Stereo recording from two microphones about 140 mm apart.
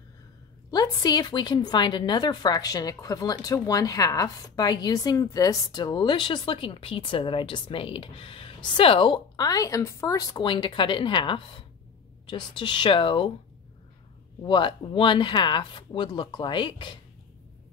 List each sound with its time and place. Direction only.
0.7 s a woman's voice: 30° left (ahead or behind)
14.4 s a woman's voice: 35° left (ahead or behind)